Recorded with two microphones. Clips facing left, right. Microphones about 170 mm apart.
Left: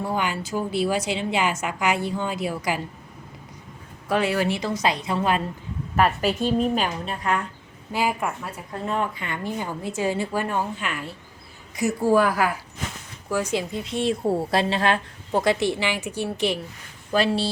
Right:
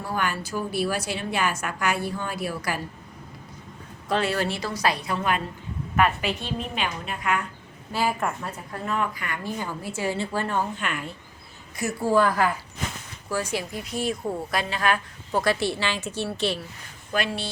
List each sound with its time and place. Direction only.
0.0 s a woman's voice: 20° left (ahead or behind)
4.1 s a woman's voice: 15° left (ahead or behind); by 5.4 s 30° left (ahead or behind)
6.0 s a woman's voice: 40° left (ahead or behind)
7.9 s a woman's voice: 10° left (ahead or behind)
8.7 s a woman's voice: 30° left (ahead or behind); by 11.1 s 5° left (ahead or behind)
11.8 s a woman's voice: 15° left (ahead or behind)
13.3 s a woman's voice: 20° left (ahead or behind)
17.1 s a woman's voice: 35° left (ahead or behind)